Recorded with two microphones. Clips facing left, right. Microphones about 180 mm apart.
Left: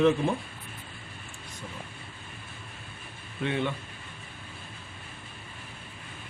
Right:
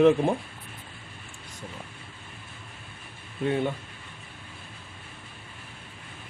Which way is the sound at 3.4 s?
40° right (ahead or behind).